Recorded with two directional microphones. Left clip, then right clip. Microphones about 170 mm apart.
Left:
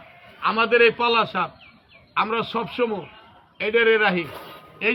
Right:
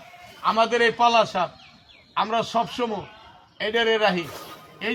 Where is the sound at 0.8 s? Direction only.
15° right (ahead or behind).